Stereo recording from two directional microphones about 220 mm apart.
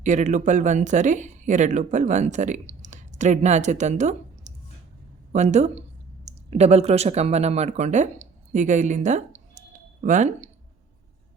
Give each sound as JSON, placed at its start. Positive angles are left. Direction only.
{"t": 0.0, "sound": "speech", "side_deg": -30}